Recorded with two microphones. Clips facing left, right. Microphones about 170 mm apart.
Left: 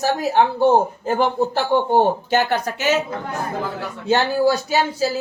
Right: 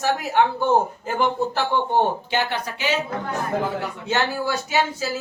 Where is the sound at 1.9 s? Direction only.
45° left (ahead or behind).